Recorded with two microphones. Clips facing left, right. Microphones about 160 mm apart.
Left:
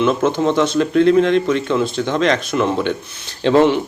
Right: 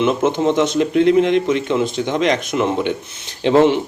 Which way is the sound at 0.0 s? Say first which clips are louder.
Even; 20° right (ahead or behind).